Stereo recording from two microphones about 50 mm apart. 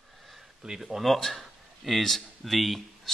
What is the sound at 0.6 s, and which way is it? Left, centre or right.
Speech, centre.